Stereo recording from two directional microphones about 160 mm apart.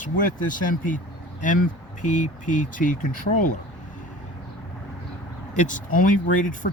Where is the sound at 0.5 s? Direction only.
55° left (ahead or behind).